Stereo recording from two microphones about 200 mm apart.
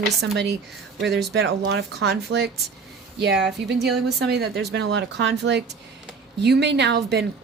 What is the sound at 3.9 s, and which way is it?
Speech, 55° right (ahead or behind).